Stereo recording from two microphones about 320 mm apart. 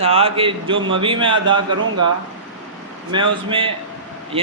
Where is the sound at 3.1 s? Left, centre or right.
Centre.